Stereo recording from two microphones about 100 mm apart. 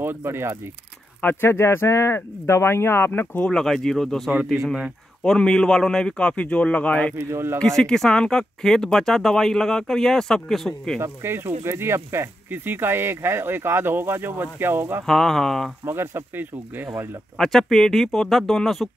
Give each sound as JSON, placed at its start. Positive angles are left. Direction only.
{"t": 0.0, "sound": "speech", "side_deg": -25}
{"t": 1.2, "sound": "speech", "side_deg": 25}
{"t": 3.4, "sound": "a man's voice", "side_deg": 5}
{"t": 7.2, "sound": "speech", "side_deg": -25}
{"t": 7.6, "sound": "speech", "side_deg": 5}
{"t": 11.0, "sound": "speech", "side_deg": -25}
{"t": 15.0, "sound": "speech", "side_deg": 0}
{"t": 15.8, "sound": "speech", "side_deg": -25}
{"t": 17.4, "sound": "speech", "side_deg": 5}